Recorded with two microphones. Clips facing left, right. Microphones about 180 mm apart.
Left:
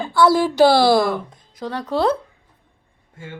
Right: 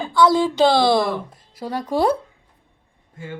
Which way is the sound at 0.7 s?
5° left (ahead or behind).